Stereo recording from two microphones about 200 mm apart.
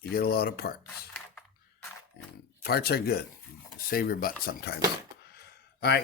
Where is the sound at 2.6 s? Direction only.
50° left (ahead or behind).